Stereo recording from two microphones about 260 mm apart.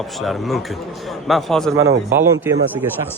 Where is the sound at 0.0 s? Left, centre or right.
Centre.